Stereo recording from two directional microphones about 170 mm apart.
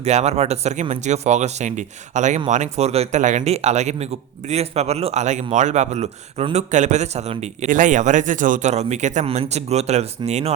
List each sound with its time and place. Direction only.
0.0 s a man's voice: 40° right (ahead or behind)